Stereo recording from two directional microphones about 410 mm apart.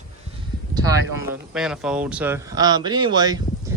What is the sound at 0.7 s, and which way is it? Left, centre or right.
Speech, centre.